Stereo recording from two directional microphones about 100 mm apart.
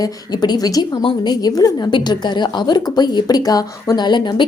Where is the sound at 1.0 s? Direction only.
55° left (ahead or behind).